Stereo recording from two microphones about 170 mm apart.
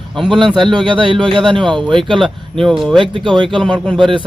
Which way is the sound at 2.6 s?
Centre (ahead or behind).